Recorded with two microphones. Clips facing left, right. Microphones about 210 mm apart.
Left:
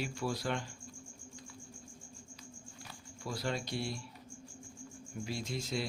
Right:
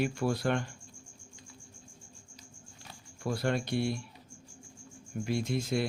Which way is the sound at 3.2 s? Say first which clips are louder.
Right 6 dB; 55° right (ahead or behind).